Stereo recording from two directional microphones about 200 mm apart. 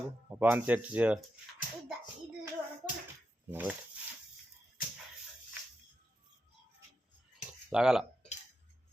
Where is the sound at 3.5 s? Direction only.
10° right (ahead or behind).